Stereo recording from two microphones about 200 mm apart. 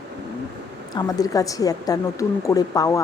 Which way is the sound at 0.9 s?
20° left (ahead or behind).